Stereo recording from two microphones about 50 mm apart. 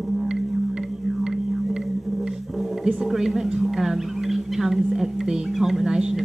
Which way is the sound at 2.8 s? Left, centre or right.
Centre.